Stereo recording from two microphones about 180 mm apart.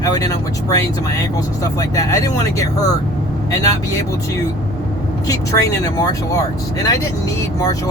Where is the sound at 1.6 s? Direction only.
20° left (ahead or behind).